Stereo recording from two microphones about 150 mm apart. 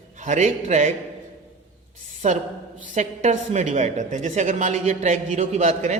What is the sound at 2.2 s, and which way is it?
A woman's voice, 50° right (ahead or behind).